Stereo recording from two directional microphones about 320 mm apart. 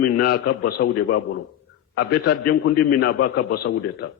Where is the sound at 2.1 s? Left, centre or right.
Left.